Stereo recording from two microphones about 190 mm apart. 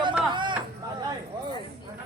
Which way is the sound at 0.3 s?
25° right (ahead or behind).